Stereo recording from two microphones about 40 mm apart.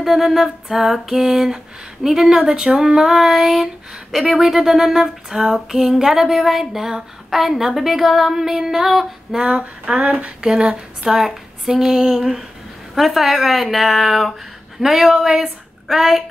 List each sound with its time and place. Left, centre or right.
0.0 s speech: centre
9.4 s a sound: right
10.4 s speech: centre